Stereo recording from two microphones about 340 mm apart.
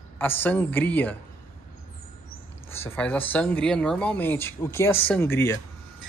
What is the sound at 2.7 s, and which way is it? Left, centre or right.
Speech, centre.